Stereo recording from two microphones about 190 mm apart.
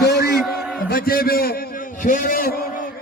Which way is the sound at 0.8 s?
50° left (ahead or behind).